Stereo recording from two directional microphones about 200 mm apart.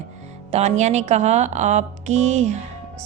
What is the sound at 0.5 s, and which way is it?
Speech, 35° right (ahead or behind).